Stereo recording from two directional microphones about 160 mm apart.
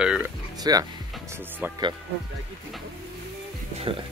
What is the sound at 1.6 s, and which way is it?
Speech, 10° right (ahead or behind).